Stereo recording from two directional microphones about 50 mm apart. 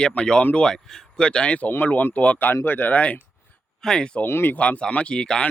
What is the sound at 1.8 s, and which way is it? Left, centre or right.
Speech, left.